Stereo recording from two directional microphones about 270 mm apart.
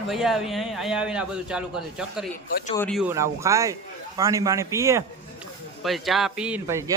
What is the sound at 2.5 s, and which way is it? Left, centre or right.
Speech, left.